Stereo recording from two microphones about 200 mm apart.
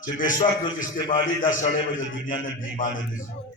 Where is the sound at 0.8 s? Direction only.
40° left (ahead or behind).